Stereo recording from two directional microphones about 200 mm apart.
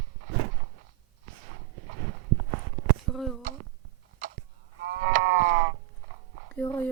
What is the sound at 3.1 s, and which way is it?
Speech, centre (ahead or behind).